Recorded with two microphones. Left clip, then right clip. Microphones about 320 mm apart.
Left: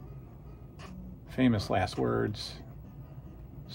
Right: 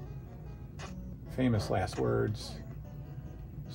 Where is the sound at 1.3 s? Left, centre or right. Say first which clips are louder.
Left 3 dB; left.